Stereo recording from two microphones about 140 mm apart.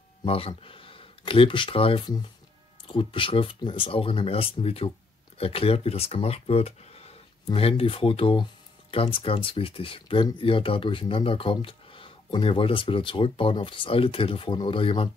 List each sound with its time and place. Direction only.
0.2 s speech: 40° left (ahead or behind)